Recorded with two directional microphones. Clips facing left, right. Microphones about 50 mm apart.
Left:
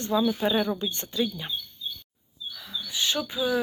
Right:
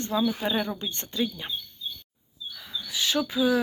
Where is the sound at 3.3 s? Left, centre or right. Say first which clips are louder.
Right 4 dB; right.